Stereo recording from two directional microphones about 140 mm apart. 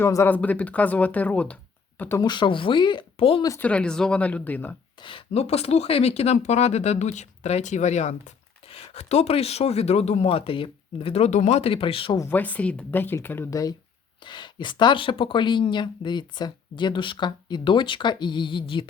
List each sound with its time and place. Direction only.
0.0 s speech: 20° left (ahead or behind)
2.2 s speech: 35° left (ahead or behind)
3.6 s speech: 10° left (ahead or behind)
4.9 s speech: 40° left (ahead or behind)
12.3 s speech: 10° left (ahead or behind); by 18.9 s 35° left (ahead or behind)